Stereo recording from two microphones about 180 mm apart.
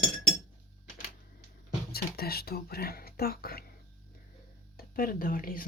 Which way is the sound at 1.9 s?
60° left (ahead or behind).